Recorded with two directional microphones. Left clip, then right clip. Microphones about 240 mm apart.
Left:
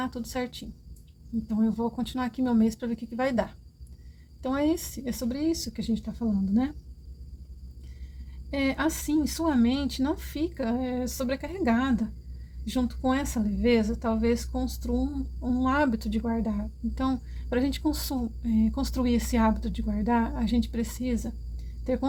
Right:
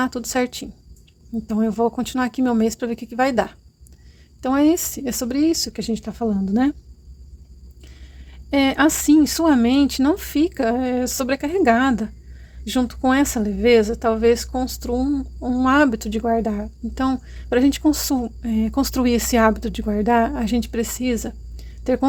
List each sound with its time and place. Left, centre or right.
0.0 s speech: right
8.4 s speech: right